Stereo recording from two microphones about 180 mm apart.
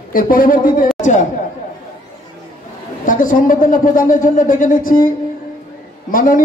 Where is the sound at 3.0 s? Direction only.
50° left (ahead or behind).